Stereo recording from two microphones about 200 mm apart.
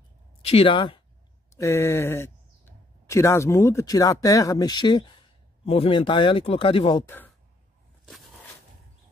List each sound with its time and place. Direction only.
0.4 s speech: 30° left (ahead or behind)
1.5 s speech: 15° left (ahead or behind)